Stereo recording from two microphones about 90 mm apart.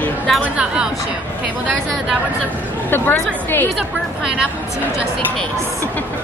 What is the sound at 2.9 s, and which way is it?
Speech, 20° left (ahead or behind).